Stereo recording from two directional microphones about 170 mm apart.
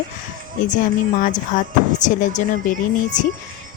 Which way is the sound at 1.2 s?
50° left (ahead or behind).